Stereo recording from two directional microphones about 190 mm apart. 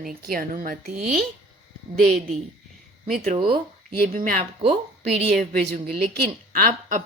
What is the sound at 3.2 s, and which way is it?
Speech, 30° right (ahead or behind).